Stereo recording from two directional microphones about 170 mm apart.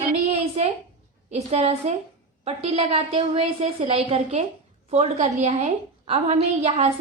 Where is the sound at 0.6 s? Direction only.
40° right (ahead or behind).